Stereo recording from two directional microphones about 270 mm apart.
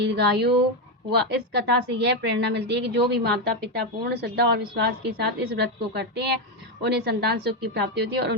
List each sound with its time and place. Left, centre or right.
0.0 s a woman's voice: right